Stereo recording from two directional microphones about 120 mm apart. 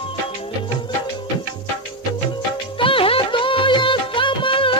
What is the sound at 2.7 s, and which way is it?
Music of bollywood, 45° left (ahead or behind).